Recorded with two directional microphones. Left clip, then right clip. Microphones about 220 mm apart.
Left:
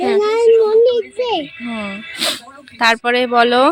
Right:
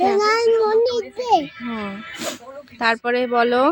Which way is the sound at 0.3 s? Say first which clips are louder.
Left 6 dB; 20° right (ahead or behind).